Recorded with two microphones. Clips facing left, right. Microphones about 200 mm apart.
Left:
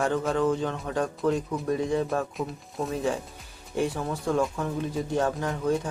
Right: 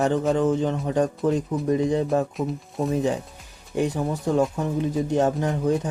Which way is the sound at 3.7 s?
20° right (ahead or behind).